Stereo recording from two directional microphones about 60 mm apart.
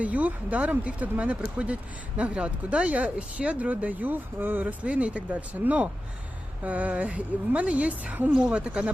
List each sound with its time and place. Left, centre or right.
0.0 s speech: right